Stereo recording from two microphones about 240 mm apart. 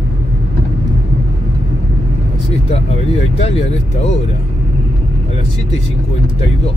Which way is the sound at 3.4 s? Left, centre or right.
Left.